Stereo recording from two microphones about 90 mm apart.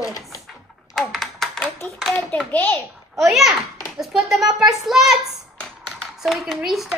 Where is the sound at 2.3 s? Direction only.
15° left (ahead or behind).